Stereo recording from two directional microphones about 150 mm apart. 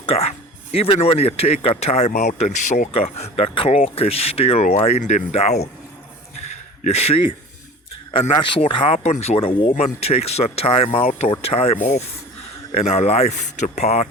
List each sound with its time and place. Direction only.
0.0 s speech: 40° left (ahead or behind)
2.9 s speech: 40° left (ahead or behind)
6.8 s speech: 45° left (ahead or behind)